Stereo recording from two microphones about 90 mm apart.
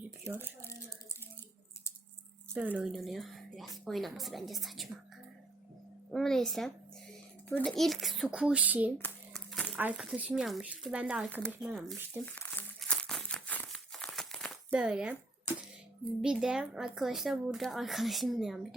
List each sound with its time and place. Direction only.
0.3 s speech: 25° right (ahead or behind)
2.6 s speech: 15° right (ahead or behind)
2.8 s speech: centre (ahead or behind)
6.1 s speech: 5° left (ahead or behind); by 8.9 s 15° right (ahead or behind)
9.3 s crumpling: 5° left (ahead or behind)
9.7 s speech: 20° right (ahead or behind)
11.6 s speech: centre (ahead or behind)
12.1 s speech: 25° right (ahead or behind)
12.8 s crumpling: 10° left (ahead or behind)
13.2 s a sound: 15° left (ahead or behind)
13.9 s crumpling: 5° left (ahead or behind)
14.7 s speech: 10° right (ahead or behind)
16.2 s speech: 5° right (ahead or behind)